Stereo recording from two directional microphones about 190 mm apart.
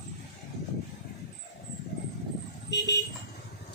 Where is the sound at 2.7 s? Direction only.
65° left (ahead or behind).